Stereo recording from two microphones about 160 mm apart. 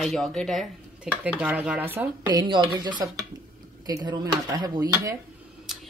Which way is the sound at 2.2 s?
30° right (ahead or behind).